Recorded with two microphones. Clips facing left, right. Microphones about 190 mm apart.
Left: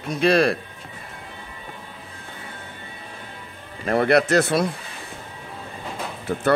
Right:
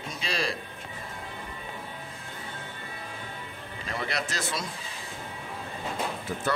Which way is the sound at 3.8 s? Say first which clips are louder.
Left 15 dB; 60° left (ahead or behind).